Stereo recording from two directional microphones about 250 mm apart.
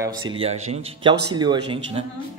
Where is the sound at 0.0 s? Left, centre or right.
Centre.